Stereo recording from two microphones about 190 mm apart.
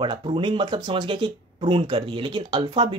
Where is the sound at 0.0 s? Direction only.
25° right (ahead or behind).